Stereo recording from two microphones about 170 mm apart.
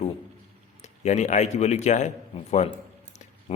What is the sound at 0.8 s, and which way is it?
A man's voice, 40° left (ahead or behind).